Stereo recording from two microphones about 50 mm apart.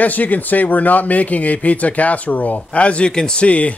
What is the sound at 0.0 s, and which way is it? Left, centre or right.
A man's voice, left.